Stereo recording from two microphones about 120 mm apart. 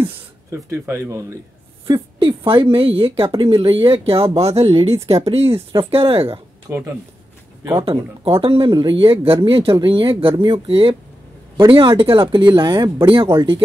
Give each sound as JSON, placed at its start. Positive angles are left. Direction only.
{"t": 0.5, "sound": "speech", "side_deg": -20}
{"t": 1.9, "sound": "speech", "side_deg": -45}
{"t": 6.7, "sound": "speech", "side_deg": -20}
{"t": 7.7, "sound": "speech", "side_deg": -50}